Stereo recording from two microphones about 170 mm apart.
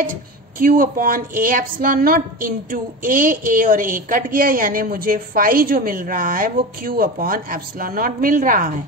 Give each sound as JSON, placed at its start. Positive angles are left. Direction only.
{"t": 0.0, "sound": "a woman's voice", "side_deg": -55}